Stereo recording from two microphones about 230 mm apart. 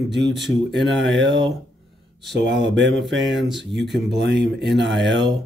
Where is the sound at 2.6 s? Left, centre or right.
Right.